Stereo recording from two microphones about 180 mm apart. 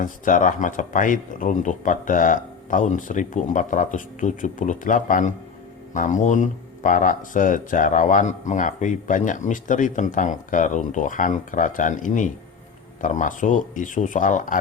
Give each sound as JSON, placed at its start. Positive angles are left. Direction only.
{"t": 0.0, "sound": "speech", "side_deg": 45}